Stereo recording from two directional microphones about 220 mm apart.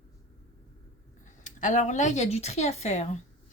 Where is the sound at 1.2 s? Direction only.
35° left (ahead or behind).